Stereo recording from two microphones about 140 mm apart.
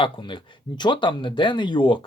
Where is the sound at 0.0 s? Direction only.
35° left (ahead or behind).